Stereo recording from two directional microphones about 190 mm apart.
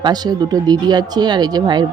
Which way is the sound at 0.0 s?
20° right (ahead or behind).